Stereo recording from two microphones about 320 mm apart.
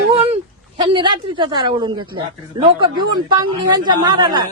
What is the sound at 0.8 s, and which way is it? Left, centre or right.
A woman's voice, centre.